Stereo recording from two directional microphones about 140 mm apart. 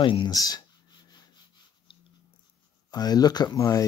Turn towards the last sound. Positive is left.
turn(degrees=25)  # may be behind; listen again after turning